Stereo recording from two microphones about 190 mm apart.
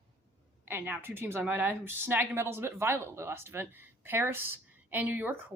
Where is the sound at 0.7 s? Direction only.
10° right (ahead or behind).